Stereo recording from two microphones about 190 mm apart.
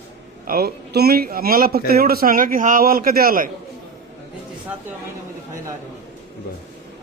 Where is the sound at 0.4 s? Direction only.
55° right (ahead or behind).